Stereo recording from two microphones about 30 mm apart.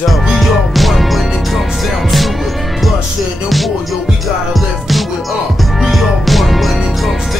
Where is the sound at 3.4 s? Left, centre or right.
Centre.